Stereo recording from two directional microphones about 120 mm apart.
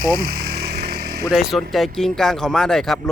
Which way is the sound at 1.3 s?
Centre (ahead or behind).